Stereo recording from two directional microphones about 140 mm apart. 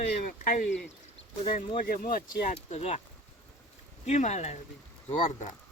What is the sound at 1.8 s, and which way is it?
Speech, 90° left.